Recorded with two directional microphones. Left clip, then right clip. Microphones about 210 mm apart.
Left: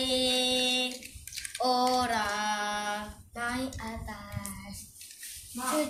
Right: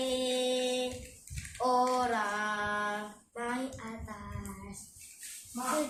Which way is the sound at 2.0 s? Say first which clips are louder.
Left 2 dB; 10° right (ahead or behind).